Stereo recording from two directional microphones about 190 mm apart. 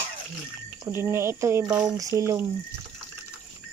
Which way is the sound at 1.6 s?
5° right (ahead or behind).